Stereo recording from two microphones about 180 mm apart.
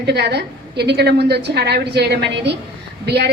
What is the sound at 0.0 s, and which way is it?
A woman's voice, 65° right (ahead or behind).